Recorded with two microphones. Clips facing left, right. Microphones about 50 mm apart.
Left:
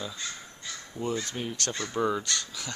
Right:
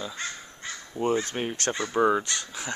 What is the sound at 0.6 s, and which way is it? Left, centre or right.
Speech, right.